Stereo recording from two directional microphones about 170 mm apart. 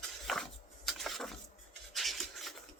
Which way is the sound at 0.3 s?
Centre (ahead or behind).